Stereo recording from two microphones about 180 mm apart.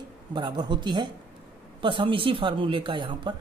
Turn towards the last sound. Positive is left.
turn(degrees=-25)  # may be behind; listen again after turning